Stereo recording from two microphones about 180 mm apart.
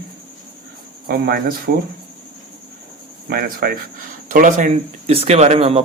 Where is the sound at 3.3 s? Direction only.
55° right (ahead or behind).